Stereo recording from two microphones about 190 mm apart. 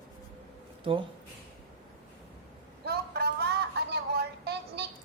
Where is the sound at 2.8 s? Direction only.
55° right (ahead or behind).